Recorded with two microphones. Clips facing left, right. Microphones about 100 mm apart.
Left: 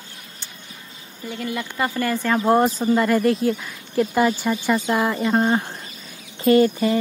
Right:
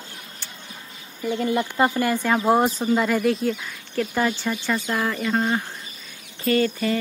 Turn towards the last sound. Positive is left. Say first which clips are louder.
# left 5 dB
turn(degrees=20)  # may be behind; listen again after turning